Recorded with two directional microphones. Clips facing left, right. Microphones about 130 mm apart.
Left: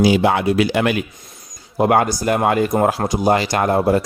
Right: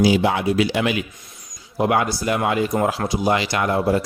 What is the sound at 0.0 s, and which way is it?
Speech, 60° left (ahead or behind).